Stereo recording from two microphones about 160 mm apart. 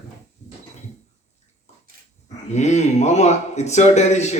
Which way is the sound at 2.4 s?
45° left (ahead or behind).